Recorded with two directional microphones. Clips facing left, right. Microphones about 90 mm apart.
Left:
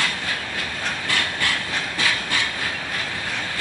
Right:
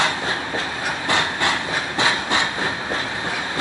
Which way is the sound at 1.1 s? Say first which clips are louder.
Right 5 dB; 20° right (ahead or behind).